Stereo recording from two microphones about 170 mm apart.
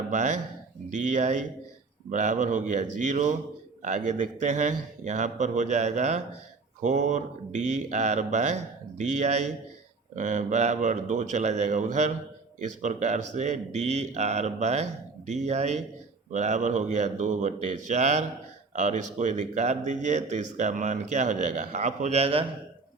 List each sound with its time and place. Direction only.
0.1 s speech: 45° right (ahead or behind)